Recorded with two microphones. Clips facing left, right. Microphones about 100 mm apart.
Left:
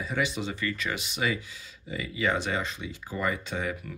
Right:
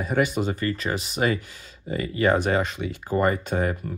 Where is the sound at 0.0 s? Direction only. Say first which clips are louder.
Right 7 dB; 50° right (ahead or behind).